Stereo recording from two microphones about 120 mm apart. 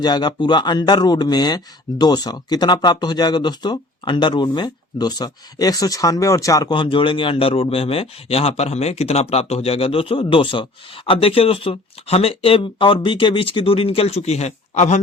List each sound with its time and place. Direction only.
0.0 s speech: 35° left (ahead or behind)
6.7 s speech: 45° left (ahead or behind); by 15.0 s 75° left (ahead or behind)